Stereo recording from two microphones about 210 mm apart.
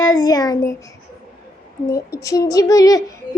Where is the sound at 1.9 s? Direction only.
15° left (ahead or behind).